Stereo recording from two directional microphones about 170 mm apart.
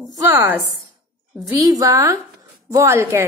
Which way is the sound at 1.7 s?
20° right (ahead or behind).